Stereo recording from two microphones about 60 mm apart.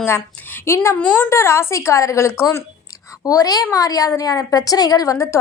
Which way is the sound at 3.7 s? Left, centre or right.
Left.